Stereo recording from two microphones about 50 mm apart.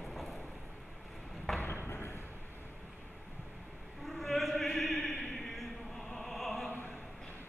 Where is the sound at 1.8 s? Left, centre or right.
Left.